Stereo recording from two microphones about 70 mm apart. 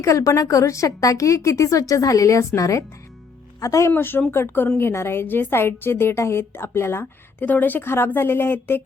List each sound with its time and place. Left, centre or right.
0.0 s a woman's voice: left
3.9 s a woman's voice: left